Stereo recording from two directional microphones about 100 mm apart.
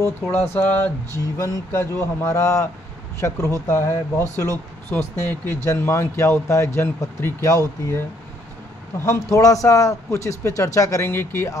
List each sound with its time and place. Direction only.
0.6 s speech: 20° left (ahead or behind)
9.0 s speech: 30° left (ahead or behind)